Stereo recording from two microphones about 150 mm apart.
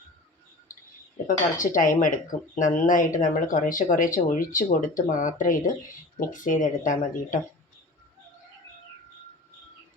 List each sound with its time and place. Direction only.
1.5 s speech: 60° left (ahead or behind)